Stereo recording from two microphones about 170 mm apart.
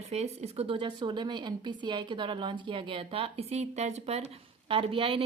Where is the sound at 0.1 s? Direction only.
40° right (ahead or behind).